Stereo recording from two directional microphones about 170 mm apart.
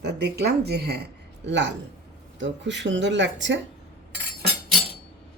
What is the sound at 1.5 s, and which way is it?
Speech, 90° right.